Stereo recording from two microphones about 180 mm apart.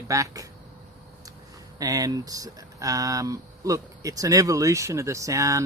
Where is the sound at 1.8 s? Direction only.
20° right (ahead or behind).